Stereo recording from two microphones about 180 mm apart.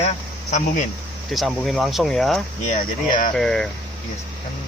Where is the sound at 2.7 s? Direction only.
50° left (ahead or behind).